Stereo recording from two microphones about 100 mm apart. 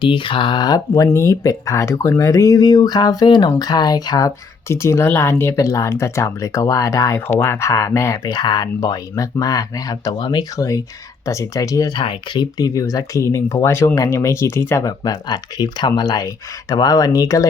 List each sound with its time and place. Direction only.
0.0 s speech: 55° left (ahead or behind); by 4.3 s 40° left (ahead or behind)
4.7 s speech: 30° left (ahead or behind)
7.3 s speech: 25° left (ahead or behind)
11.9 s speech: 50° left (ahead or behind); by 17.4 s 35° left (ahead or behind)